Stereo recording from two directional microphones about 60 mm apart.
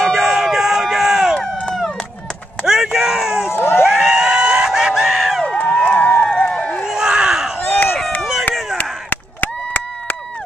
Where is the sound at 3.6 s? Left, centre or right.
Left.